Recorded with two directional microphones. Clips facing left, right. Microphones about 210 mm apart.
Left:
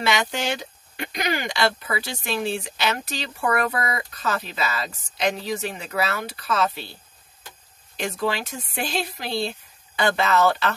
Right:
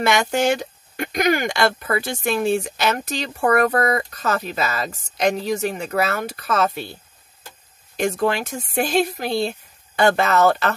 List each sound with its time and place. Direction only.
0.0 s speech: 50° right (ahead or behind)
7.9 s speech: 45° right (ahead or behind)